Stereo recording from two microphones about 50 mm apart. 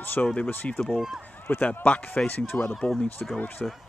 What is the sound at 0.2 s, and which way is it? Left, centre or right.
Speech, left.